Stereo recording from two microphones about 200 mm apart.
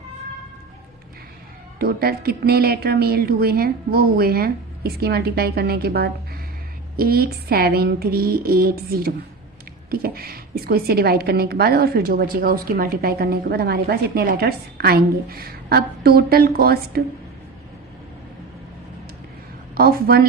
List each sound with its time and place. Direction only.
1.8 s a woman's voice: 50° right (ahead or behind)
19.7 s a woman's voice: 50° right (ahead or behind)